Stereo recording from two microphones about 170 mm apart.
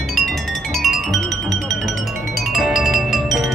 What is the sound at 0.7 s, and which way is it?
Music, centre (ahead or behind).